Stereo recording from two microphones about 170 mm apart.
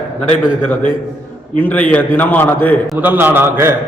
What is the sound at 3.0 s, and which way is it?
Speech, 10° right (ahead or behind).